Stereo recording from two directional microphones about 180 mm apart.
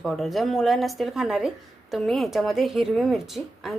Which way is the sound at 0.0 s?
Centre (ahead or behind).